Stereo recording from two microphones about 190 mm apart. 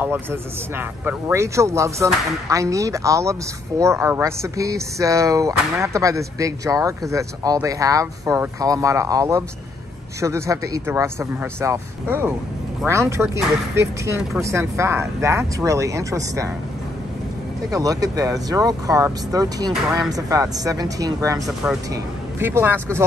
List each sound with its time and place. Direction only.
0.0 s speech: 10° right (ahead or behind)
13.3 s speech: 15° right (ahead or behind)
17.7 s speech: 20° right (ahead or behind)